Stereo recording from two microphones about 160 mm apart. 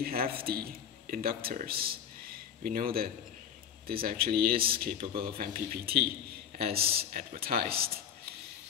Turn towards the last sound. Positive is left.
turn(degrees=-70)  # may be behind; listen again after turning